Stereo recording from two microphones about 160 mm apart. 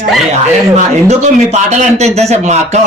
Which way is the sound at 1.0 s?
45° right (ahead or behind).